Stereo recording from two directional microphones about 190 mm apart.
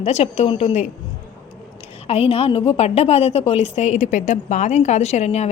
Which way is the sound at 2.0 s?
30° left (ahead or behind).